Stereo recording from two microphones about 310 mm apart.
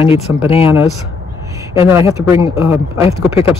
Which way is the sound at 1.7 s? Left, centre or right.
Centre.